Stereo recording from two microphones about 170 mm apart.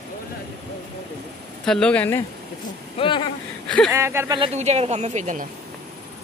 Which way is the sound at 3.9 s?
15° right (ahead or behind).